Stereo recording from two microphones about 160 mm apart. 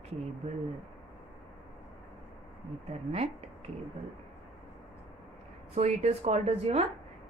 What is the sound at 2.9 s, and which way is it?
Speech, 40° right (ahead or behind).